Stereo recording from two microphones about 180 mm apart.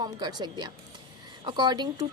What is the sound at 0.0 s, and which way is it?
A woman's voice, 20° right (ahead or behind).